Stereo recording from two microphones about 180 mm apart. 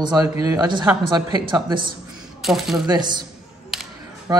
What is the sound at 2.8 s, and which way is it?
Speech, 25° right (ahead or behind).